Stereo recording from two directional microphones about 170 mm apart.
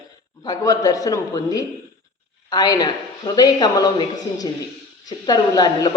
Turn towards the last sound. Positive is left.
turn(degrees=25)  # may be behind; listen again after turning